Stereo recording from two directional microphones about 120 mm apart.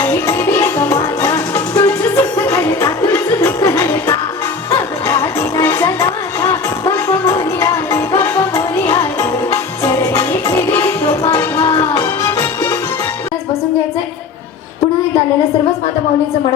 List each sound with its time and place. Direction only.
0.0 s music: 15° left (ahead or behind)
11.3 s a sound: 25° left (ahead or behind)
11.8 s music: 30° left (ahead or behind)